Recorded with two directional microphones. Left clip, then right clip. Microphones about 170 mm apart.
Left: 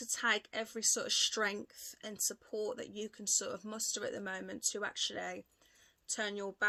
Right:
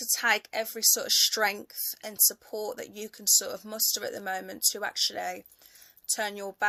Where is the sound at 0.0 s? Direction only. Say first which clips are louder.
Right 8 dB; 30° left (ahead or behind).